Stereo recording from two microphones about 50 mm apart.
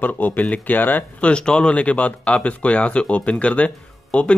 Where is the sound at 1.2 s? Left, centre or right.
Centre.